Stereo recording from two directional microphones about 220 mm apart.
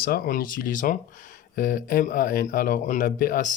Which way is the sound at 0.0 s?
40° left (ahead or behind).